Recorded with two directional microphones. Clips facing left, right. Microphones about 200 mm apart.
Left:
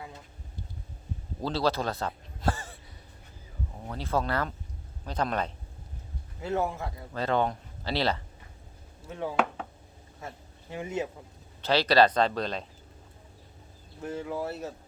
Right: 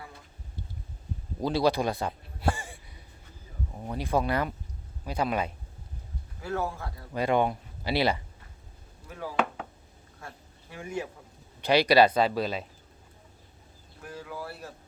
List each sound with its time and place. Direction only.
1.4 s a man's voice: 15° right (ahead or behind)
3.8 s speech: 15° right (ahead or behind)
6.4 s speech: 20° left (ahead or behind)
7.1 s speech: 15° right (ahead or behind)
9.0 s speech: 25° left (ahead or behind)
9.3 s chopping: centre (ahead or behind)
10.2 s a sound: 20° left (ahead or behind)
11.6 s speech: 15° right (ahead or behind)
14.0 s speech: 25° left (ahead or behind)